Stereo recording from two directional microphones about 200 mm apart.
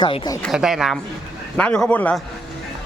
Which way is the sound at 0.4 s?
Centre (ahead or behind).